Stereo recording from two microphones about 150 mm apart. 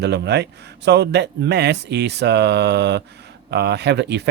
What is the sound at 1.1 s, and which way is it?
Speech, 90° right.